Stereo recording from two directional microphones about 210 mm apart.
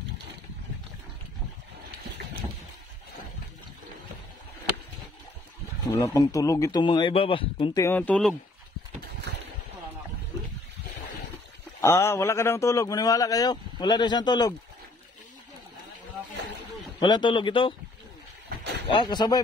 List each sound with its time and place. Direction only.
5.9 s a man's voice: 15° left (ahead or behind)
11.8 s a man's voice: 15° left (ahead or behind)
17.0 s speech: 20° left (ahead or behind)
18.9 s speech: 20° left (ahead or behind)